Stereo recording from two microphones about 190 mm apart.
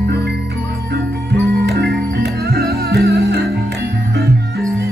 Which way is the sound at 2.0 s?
60° right (ahead or behind).